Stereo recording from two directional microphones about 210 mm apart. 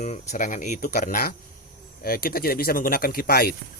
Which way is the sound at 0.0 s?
35° left (ahead or behind).